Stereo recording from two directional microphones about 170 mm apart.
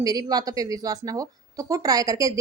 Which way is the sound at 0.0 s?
20° right (ahead or behind).